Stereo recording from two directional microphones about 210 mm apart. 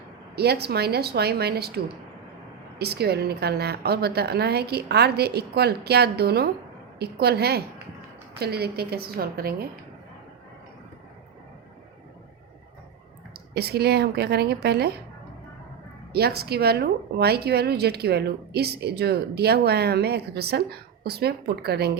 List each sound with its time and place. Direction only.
0.3 s a woman's voice: 50° right (ahead or behind)
13.5 s a woman's voice: 50° right (ahead or behind)
16.1 s a woman's voice: 50° right (ahead or behind)